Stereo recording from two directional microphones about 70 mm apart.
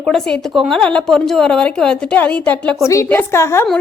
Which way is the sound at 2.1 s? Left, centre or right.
Left.